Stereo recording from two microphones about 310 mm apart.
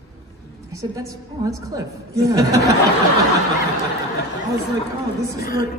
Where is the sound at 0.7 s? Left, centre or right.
Centre.